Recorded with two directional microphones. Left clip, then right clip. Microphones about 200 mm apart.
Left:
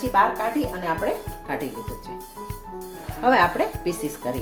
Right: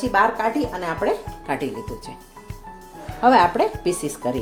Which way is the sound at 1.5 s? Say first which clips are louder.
Right 4 dB; 40° right (ahead or behind).